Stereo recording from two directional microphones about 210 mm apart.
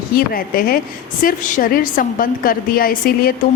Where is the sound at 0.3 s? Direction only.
45° left (ahead or behind).